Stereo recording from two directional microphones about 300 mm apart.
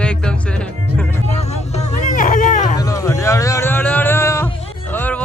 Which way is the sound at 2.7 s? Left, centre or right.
Centre.